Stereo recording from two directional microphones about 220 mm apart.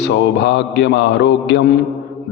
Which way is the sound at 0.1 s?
50° left (ahead or behind).